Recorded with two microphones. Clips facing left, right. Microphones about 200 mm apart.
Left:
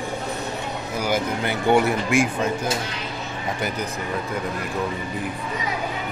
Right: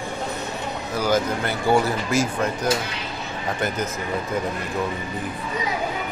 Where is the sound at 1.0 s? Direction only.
15° left (ahead or behind).